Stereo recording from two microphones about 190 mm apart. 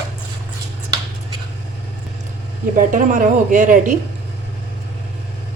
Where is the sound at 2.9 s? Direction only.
45° right (ahead or behind).